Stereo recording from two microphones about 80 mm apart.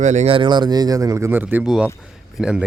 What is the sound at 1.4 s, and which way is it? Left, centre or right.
Speech, right.